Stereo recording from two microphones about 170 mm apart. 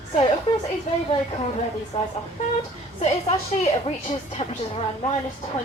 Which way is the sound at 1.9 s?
25° left (ahead or behind).